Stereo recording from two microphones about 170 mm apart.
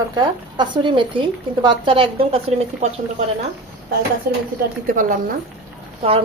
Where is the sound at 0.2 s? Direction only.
25° right (ahead or behind).